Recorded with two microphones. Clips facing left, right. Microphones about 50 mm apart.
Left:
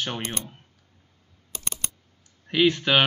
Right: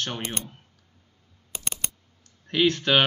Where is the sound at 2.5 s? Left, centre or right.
Centre.